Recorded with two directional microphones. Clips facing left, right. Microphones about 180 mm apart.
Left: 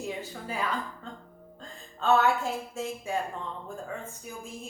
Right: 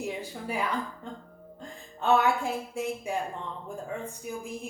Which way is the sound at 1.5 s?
15° right (ahead or behind).